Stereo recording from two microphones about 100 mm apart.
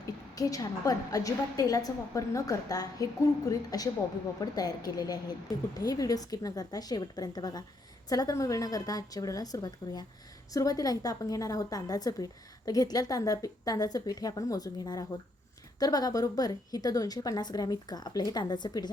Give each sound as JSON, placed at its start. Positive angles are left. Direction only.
{"t": 0.3, "sound": "a woman's voice", "side_deg": 35}